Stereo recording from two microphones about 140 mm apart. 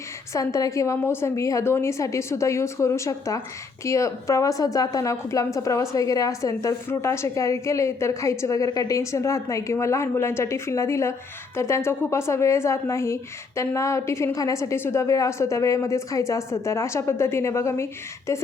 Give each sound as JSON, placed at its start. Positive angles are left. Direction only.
{"t": 0.3, "sound": "a woman's voice", "side_deg": 25}